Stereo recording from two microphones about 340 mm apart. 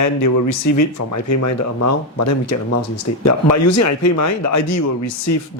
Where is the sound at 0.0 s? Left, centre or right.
Left.